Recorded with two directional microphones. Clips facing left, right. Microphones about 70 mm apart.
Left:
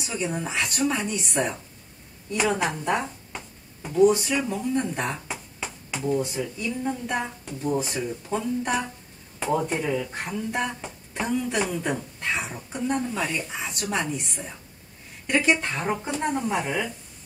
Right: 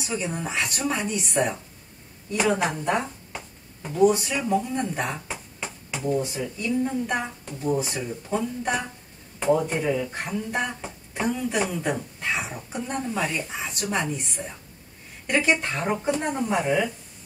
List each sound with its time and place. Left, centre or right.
0.0 s speech: centre